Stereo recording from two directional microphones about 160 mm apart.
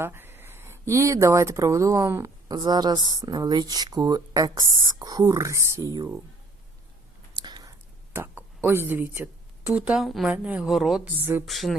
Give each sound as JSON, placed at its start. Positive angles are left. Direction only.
{"t": 0.0, "sound": "speech", "side_deg": -15}
{"t": 7.3, "sound": "a sound", "side_deg": -25}
{"t": 8.1, "sound": "a woman's voice", "side_deg": -15}